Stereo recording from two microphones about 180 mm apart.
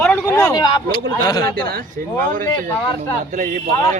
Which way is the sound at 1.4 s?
55° right (ahead or behind).